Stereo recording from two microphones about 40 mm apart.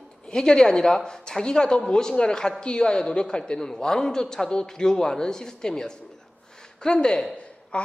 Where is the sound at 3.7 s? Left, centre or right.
Centre.